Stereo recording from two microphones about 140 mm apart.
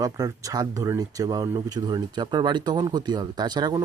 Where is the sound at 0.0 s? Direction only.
25° right (ahead or behind).